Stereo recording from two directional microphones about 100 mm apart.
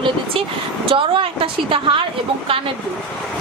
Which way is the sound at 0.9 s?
60° right (ahead or behind).